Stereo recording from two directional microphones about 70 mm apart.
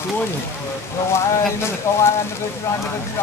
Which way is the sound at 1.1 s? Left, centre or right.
Left.